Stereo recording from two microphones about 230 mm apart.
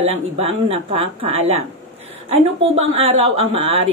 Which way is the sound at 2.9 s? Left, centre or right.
Right.